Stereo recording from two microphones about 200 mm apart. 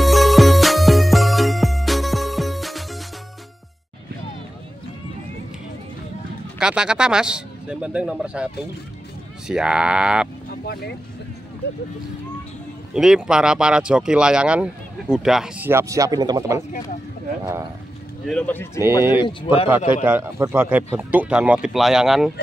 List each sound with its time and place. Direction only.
0.0 s music: centre (ahead or behind)
6.6 s speech: 5° right (ahead or behind)
9.5 s speech: 5° right (ahead or behind)
10.6 s speech: 50° left (ahead or behind)
12.9 s speech: 5° right (ahead or behind)
18.2 s speech: 5° left (ahead or behind)
19.2 s speech: 25° left (ahead or behind)
19.9 s speech: 10° right (ahead or behind)